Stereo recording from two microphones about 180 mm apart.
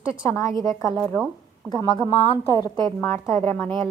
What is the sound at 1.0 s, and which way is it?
Speech, 5° left (ahead or behind).